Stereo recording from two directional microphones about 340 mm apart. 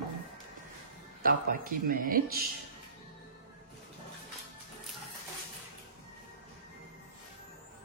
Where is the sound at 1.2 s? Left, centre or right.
Right.